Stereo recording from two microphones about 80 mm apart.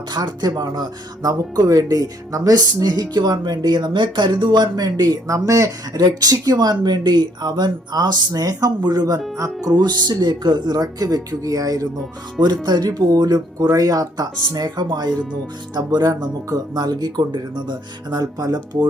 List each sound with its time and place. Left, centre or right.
0.1 s speech: right
5.9 s speech: right
9.7 s speech: right
12.6 s speech: right